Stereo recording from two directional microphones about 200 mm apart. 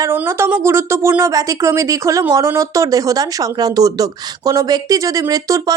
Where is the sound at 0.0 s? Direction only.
10° right (ahead or behind).